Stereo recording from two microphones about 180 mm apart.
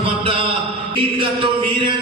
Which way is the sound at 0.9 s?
30° right (ahead or behind).